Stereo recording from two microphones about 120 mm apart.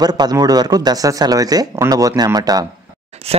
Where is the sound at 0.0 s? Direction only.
35° right (ahead or behind).